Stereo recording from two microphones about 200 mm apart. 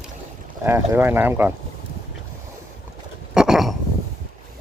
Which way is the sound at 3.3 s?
Centre (ahead or behind).